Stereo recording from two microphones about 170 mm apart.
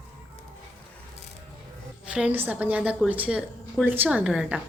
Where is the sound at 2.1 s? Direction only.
10° right (ahead or behind).